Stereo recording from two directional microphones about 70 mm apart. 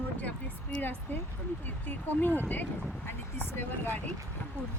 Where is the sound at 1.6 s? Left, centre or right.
Left.